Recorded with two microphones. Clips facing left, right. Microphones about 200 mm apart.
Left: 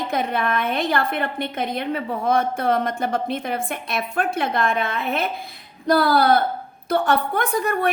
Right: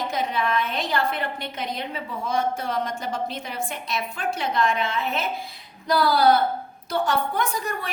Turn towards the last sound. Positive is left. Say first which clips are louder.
# left 8 dB
turn(degrees=55)  # may be behind; listen again after turning